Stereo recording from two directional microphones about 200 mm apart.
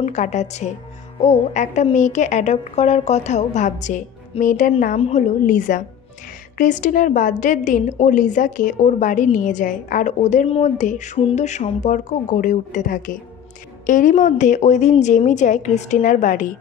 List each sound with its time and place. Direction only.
0.0 s a woman's voice: 35° left (ahead or behind)